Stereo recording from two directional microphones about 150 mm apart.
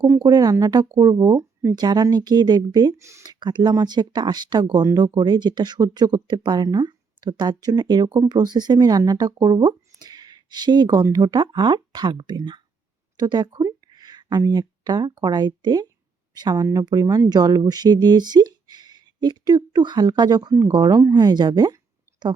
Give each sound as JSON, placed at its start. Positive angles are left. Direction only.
{"t": 0.0, "sound": "speech", "side_deg": -25}